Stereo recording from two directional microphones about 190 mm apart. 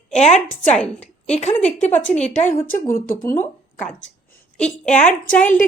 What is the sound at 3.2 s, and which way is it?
Speech, 10° left (ahead or behind).